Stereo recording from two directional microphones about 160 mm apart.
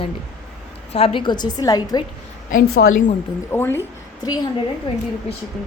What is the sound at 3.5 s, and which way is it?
Speech, 15° left (ahead or behind).